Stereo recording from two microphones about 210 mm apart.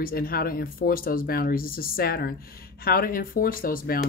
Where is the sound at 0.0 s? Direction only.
45° left (ahead or behind).